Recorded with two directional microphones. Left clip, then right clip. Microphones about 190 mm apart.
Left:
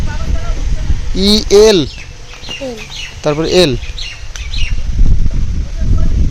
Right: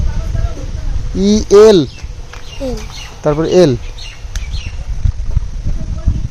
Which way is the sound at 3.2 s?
Centre (ahead or behind).